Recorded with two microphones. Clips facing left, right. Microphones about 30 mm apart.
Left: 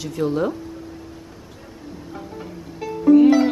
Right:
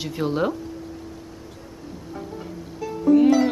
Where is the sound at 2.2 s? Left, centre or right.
Left.